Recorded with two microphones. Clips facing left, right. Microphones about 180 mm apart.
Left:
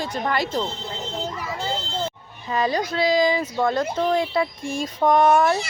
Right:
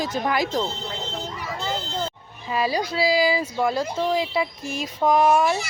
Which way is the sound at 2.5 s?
10° right (ahead or behind).